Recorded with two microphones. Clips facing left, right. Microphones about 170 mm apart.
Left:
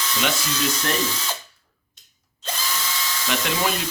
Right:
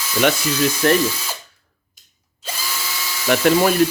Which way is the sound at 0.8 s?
55° right (ahead or behind).